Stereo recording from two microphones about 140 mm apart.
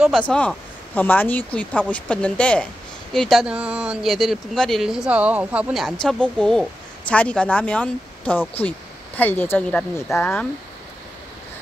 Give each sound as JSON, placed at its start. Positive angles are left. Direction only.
{"t": 0.0, "sound": "speech", "side_deg": -5}
{"t": 0.3, "sound": "speech", "side_deg": 5}